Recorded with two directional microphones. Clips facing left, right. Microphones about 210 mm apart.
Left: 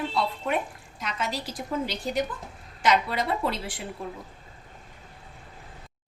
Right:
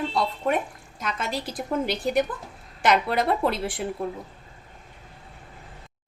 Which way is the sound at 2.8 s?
55° right (ahead or behind).